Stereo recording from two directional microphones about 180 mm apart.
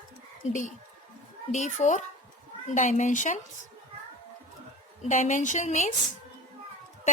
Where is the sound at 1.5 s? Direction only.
40° left (ahead or behind).